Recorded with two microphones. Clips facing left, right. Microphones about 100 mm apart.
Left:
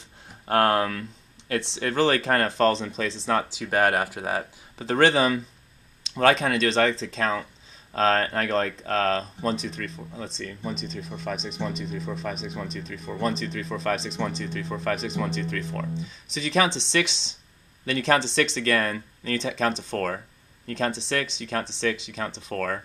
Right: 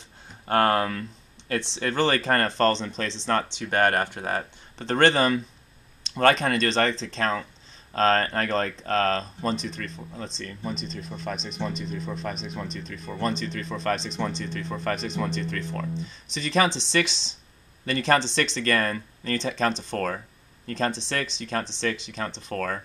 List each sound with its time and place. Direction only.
0.3 s speech: centre (ahead or behind)